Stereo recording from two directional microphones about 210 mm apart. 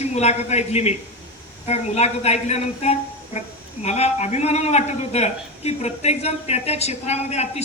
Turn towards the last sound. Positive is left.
turn(degrees=30)  # may be behind; listen again after turning